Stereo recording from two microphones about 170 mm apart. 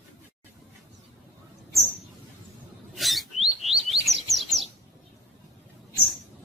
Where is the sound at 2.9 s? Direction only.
Centre (ahead or behind).